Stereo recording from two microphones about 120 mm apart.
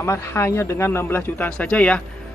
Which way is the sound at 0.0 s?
25° left (ahead or behind).